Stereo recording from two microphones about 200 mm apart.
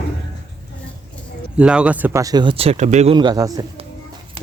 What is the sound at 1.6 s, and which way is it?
Speech, 5° right (ahead or behind).